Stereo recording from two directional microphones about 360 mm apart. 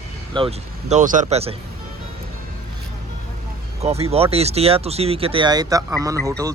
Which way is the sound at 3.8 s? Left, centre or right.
Centre.